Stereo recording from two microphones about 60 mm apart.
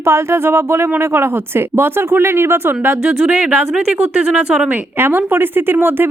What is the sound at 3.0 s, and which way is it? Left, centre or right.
Speech, right.